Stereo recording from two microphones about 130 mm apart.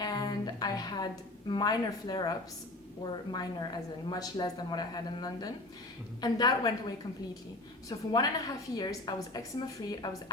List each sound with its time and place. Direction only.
0.0 s a woman's voice: 30° left (ahead or behind)